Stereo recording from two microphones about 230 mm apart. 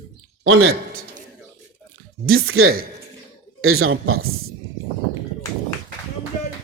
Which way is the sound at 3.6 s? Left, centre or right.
Right.